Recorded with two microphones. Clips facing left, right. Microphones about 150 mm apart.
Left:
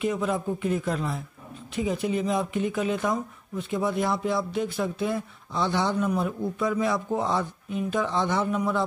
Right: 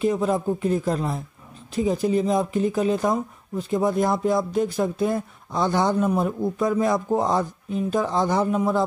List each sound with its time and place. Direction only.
0.0 s speech: 35° right (ahead or behind)